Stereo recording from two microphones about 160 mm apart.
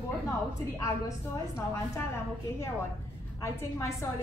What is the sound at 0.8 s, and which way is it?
A woman's voice, 20° left (ahead or behind).